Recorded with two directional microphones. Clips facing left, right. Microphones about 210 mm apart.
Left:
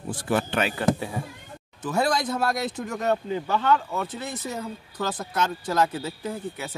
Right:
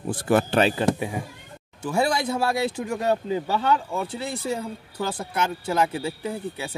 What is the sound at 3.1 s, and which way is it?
Speech, 25° right (ahead or behind).